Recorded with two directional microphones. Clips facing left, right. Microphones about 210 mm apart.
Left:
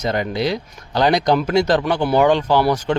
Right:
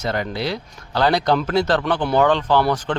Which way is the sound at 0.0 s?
15° left (ahead or behind).